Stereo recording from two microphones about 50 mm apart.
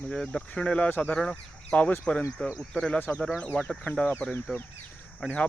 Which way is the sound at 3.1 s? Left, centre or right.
Left.